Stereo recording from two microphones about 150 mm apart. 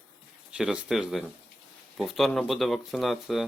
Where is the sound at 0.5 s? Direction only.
5° right (ahead or behind).